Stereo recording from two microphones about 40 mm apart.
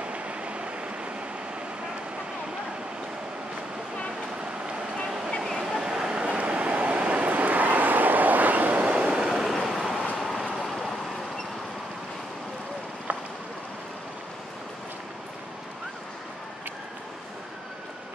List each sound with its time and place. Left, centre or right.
0.0 s vehicle: right
5.6 s vehicle: centre; by 8.8 s right
8.8 s train: right
9.1 s vehicle: centre
9.5 s vehicle: centre